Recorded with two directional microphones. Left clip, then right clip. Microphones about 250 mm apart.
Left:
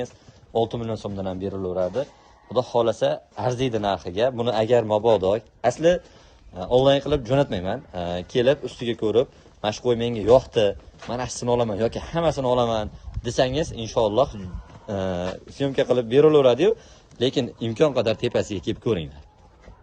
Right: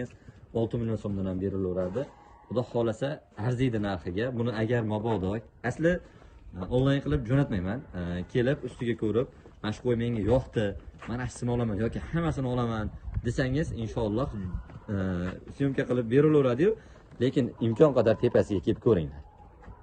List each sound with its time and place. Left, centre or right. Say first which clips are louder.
0.5 s speech: left 7 dB; centre